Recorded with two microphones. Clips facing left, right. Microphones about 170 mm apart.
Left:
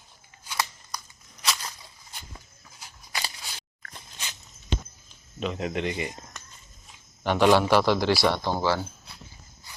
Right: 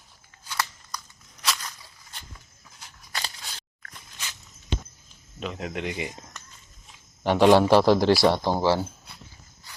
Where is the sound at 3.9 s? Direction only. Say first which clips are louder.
Left 1 dB; 30° left (ahead or behind).